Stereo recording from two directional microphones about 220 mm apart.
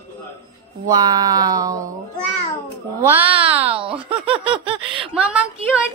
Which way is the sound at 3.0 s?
10° right (ahead or behind).